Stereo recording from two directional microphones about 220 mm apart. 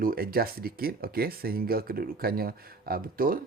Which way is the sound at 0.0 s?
40° right (ahead or behind).